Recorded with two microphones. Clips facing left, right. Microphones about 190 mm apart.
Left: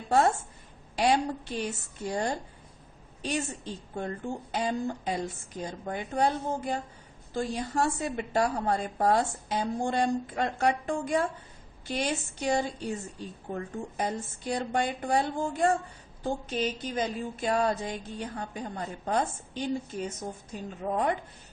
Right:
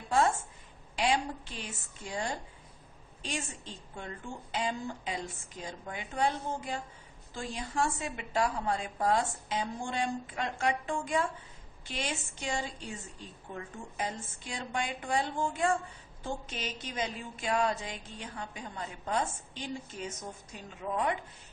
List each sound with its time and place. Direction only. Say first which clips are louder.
0.1 s a woman's voice: left 4 dB; 40° left (ahead or behind)
20.9 s a woman's voice: left 3 dB; 35° left (ahead or behind)